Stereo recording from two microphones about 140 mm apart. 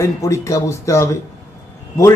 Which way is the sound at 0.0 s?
20° left (ahead or behind).